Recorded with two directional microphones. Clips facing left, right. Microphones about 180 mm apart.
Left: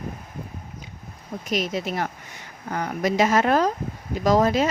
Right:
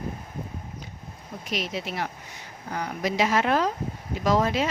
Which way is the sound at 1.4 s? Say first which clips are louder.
Left 5 dB; 45° left (ahead or behind).